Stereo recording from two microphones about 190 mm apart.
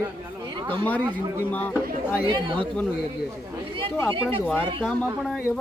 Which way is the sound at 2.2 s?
25° right (ahead or behind).